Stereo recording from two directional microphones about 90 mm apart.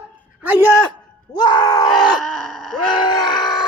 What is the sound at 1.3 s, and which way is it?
Groan, 50° left (ahead or behind).